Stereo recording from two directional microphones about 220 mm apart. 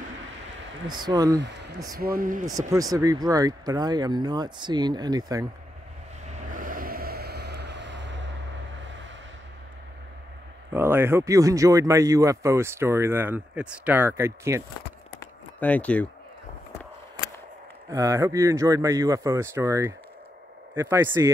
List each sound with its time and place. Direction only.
0.8 s speech: 20° right (ahead or behind)
2.0 s speech: 40° right (ahead or behind)
2.4 s speech: 15° right (ahead or behind)
6.5 s a sound: 40° right (ahead or behind)
10.7 s speech: 10° right (ahead or behind)
15.6 s speech: 5° left (ahead or behind)
17.9 s speech: 15° right (ahead or behind)